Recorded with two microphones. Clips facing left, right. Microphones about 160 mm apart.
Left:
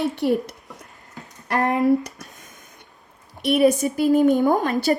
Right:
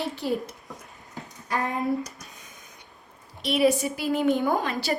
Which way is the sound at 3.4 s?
50° left (ahead or behind).